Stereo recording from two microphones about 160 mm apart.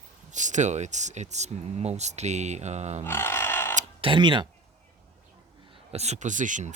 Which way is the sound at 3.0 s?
15° left (ahead or behind).